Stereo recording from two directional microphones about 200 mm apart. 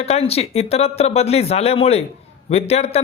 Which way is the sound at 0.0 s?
30° left (ahead or behind).